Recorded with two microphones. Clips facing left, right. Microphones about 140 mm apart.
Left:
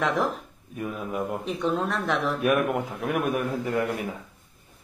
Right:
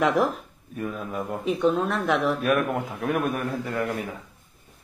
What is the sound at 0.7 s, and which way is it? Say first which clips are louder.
A woman's voice: even; 5° left (ahead or behind).